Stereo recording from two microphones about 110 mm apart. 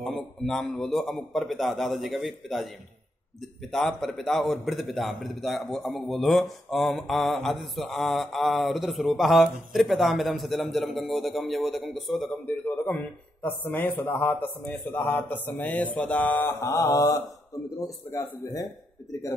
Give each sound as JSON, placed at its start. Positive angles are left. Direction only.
{"t": 0.0, "sound": "a man's voice", "side_deg": 5}
{"t": 3.7, "sound": "a man's voice", "side_deg": 5}
{"t": 12.3, "sound": "a man's voice", "side_deg": 15}